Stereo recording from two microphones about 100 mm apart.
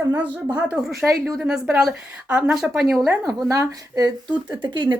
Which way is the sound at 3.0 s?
30° right (ahead or behind).